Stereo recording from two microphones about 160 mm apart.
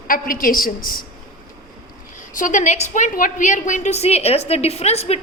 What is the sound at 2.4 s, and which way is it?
A woman's voice, 55° left (ahead or behind).